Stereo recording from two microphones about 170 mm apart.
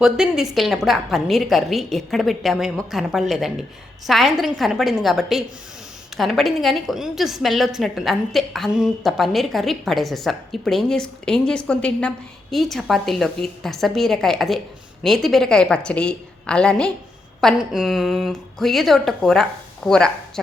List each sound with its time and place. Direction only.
0.0 s a woman's voice: 5° right (ahead or behind)